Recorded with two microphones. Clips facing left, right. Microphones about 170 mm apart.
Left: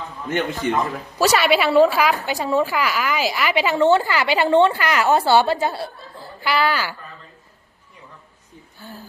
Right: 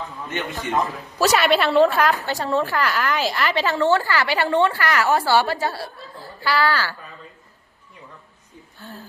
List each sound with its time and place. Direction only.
0.5 s speech: centre (ahead or behind)
2.1 s speech: 15° left (ahead or behind)
2.6 s a woman's voice: 5° left (ahead or behind)
8.8 s speech: centre (ahead or behind)